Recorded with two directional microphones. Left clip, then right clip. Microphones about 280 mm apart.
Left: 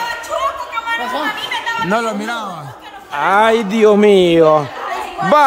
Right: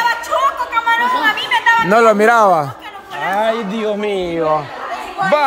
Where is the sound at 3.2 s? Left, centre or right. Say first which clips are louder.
Left 5 dB; centre.